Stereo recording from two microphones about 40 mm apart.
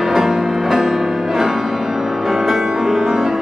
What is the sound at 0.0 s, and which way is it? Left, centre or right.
Music, centre.